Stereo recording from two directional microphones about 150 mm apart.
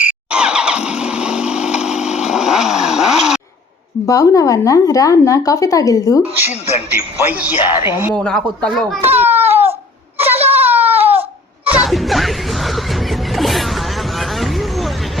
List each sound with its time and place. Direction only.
0.0 s vehicle: 10° right (ahead or behind)
1.8 s chainsaw: 5° right (ahead or behind)
4.0 s a woman's voice: 20° left (ahead or behind)
7.3 s speech: 10° right (ahead or behind)
8.1 s speech: 5° left (ahead or behind)
9.0 s baby cry: 15° right (ahead or behind)